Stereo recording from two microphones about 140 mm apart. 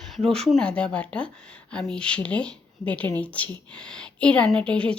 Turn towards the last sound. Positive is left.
turn(degrees=10)  # may be behind; listen again after turning